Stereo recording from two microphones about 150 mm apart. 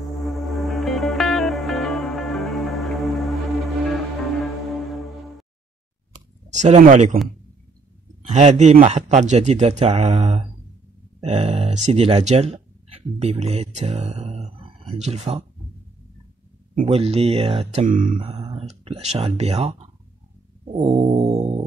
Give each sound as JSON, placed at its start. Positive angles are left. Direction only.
{"t": 0.0, "sound": "music", "side_deg": 0}
{"t": 6.5, "sound": "speech", "side_deg": -50}
{"t": 8.3, "sound": "speech", "side_deg": -50}
{"t": 16.8, "sound": "speech", "side_deg": -40}
{"t": 17.8, "sound": "mantra", "side_deg": -60}
{"t": 18.2, "sound": "speech", "side_deg": -35}
{"t": 20.7, "sound": "a sound", "side_deg": -40}